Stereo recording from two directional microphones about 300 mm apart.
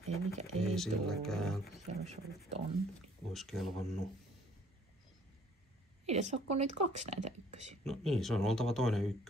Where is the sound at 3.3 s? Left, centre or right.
Centre.